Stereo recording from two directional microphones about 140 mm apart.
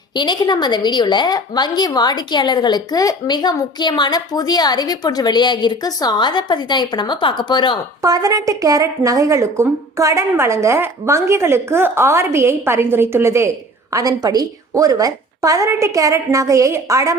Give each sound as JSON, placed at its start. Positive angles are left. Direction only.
{"t": 0.1, "sound": "a woman's voice", "side_deg": 30}
{"t": 8.0, "sound": "a woman's voice", "side_deg": -25}